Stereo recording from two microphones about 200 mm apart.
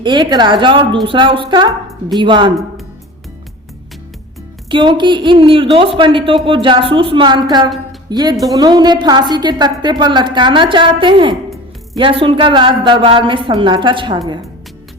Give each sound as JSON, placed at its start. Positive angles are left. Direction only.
{"t": 0.0, "sound": "a woman's voice", "side_deg": -20}
{"t": 4.7, "sound": "a woman's voice", "side_deg": -25}